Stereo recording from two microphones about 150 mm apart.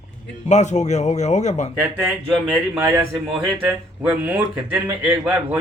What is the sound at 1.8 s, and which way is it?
Speech, 10° right (ahead or behind).